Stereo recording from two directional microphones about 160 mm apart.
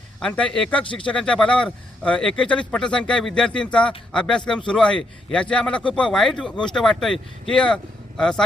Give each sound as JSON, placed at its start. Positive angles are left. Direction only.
{"t": 0.2, "sound": "a man's voice", "side_deg": 5}